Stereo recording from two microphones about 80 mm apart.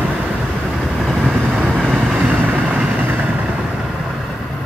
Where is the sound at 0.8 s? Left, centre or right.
Centre.